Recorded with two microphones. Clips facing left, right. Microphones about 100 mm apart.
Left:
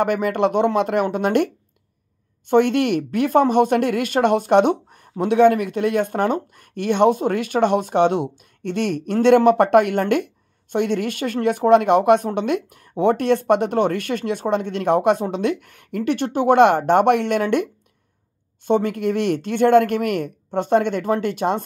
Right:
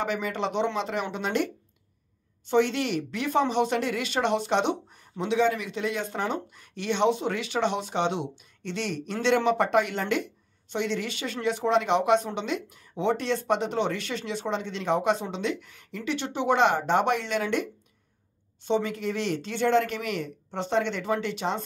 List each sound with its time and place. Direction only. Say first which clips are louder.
0.0 s speech: left 10 dB; 55° left (ahead or behind)